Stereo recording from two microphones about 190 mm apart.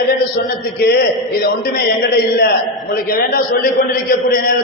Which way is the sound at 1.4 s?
55° left (ahead or behind).